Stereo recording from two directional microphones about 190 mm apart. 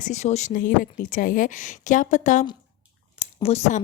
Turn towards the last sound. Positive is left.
turn(degrees=35)  # may be behind; listen again after turning